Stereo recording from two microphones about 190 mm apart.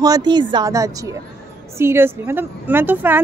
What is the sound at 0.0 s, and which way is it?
A woman's voice, 20° right (ahead or behind).